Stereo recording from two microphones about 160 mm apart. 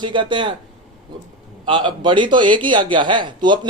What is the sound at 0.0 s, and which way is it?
Speech, 30° right (ahead or behind).